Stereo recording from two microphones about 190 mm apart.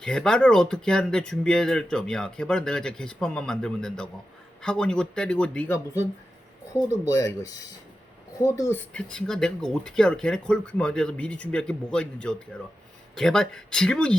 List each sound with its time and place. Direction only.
0.0 s speech: 5° left (ahead or behind)
7.1 s speech: 15° left (ahead or behind)